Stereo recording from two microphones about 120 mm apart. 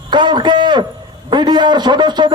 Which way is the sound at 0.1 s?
40° right (ahead or behind).